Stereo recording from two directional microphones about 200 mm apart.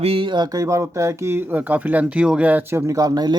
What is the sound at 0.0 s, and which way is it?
Speech, 30° right (ahead or behind).